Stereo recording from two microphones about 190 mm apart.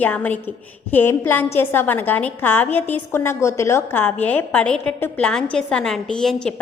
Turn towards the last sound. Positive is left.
turn(degrees=5)  # may be behind; listen again after turning